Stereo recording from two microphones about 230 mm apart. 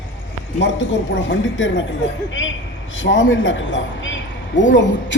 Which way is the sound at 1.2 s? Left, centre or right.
Left.